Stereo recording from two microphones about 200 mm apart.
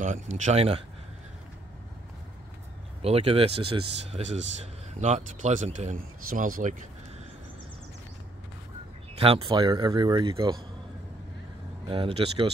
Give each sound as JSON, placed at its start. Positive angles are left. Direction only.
{"t": 0.0, "sound": "speech", "side_deg": -40}
{"t": 3.0, "sound": "speech", "side_deg": -30}
{"t": 9.2, "sound": "speech", "side_deg": -25}
{"t": 11.9, "sound": "speech", "side_deg": -25}